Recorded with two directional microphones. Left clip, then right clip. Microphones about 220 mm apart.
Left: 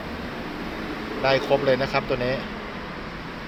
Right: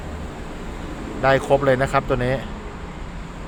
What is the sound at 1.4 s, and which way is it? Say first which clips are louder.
Speech: right 3 dB; 20° right (ahead or behind).